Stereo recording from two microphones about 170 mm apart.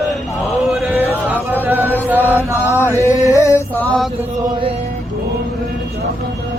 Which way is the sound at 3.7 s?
10° left (ahead or behind).